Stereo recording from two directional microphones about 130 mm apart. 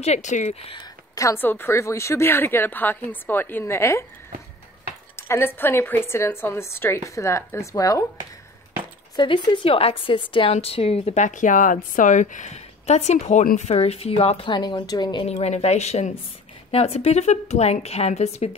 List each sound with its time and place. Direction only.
0.0 s a woman's voice: 60° left (ahead or behind)
0.7 s speech: 25° left (ahead or behind)
5.1 s speech: 20° left (ahead or behind)
9.1 s a woman's voice: 35° left (ahead or behind)
14.5 s a woman's voice: 35° left (ahead or behind)
15.2 s a woman's voice: 55° left (ahead or behind)